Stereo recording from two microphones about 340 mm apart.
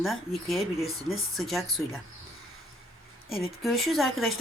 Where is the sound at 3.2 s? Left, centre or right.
Centre.